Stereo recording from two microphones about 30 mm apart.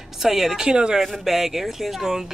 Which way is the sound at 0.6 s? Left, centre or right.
Right.